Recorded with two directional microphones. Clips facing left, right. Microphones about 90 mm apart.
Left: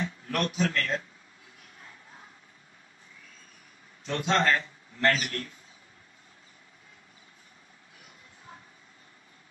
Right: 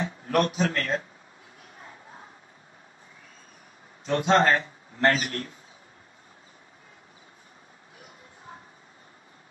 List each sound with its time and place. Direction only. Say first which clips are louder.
0.0 s speech: right 6 dB; 30° right (ahead or behind)
1.8 s a sound: right 5 dB; 30° right (ahead or behind)
4.0 s a man's voice: right 5 dB; 30° right (ahead or behind)
8.5 s vehicle: right 4 dB; 25° right (ahead or behind)